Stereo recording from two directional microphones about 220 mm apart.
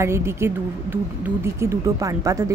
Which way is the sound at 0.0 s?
10° right (ahead or behind).